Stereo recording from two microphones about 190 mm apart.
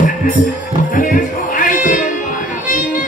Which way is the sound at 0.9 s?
45° left (ahead or behind).